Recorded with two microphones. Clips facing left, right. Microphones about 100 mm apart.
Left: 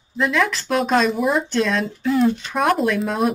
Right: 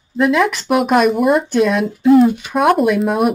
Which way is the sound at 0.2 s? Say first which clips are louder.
Right 6 dB; 20° right (ahead or behind).